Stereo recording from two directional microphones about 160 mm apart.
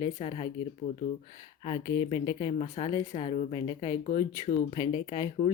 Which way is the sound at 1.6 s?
25° left (ahead or behind).